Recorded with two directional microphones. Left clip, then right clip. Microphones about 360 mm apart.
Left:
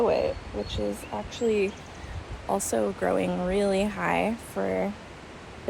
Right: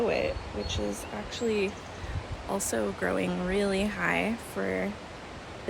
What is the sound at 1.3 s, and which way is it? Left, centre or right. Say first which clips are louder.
Speech: left 4 dB; centre.